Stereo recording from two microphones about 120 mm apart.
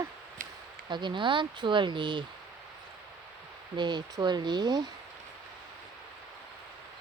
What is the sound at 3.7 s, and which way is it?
Speech, 40° right (ahead or behind).